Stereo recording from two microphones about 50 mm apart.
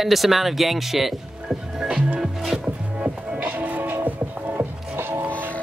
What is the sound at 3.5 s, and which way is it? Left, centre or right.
Music, right.